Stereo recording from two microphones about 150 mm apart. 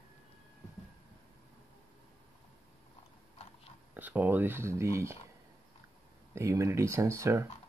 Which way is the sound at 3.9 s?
10° right (ahead or behind).